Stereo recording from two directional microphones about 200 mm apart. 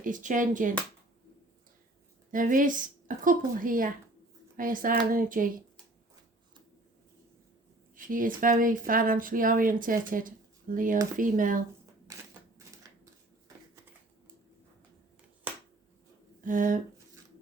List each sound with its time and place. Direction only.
0.0 s speech: 40° right (ahead or behind)
2.3 s speech: 40° right (ahead or behind)
7.9 s speech: 40° right (ahead or behind)
16.4 s a sound: 40° right (ahead or behind)